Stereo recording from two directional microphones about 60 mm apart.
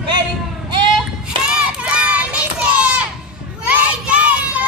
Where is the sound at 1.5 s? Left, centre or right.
Centre.